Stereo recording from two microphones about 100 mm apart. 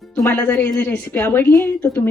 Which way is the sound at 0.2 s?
20° left (ahead or behind).